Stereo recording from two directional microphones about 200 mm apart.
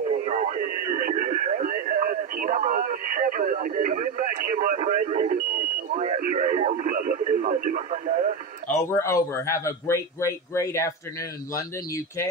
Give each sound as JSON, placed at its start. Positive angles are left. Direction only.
{"t": 0.2, "sound": "radio", "side_deg": -35}
{"t": 8.6, "sound": "a man's voice", "side_deg": 15}